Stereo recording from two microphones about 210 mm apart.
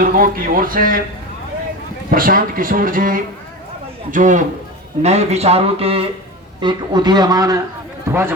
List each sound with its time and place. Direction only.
0.0 s speech: 40° right (ahead or behind)
2.0 s speech: 45° right (ahead or behind); by 8.4 s 10° right (ahead or behind)